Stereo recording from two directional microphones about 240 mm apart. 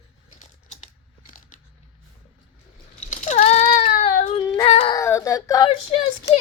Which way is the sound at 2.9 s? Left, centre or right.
Left.